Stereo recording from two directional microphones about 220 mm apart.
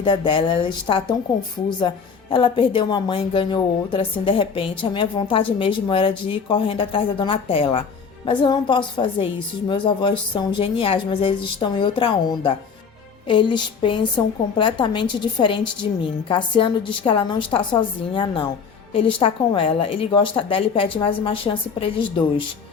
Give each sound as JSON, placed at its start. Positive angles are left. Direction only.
{"t": 0.0, "sound": "speech", "side_deg": 20}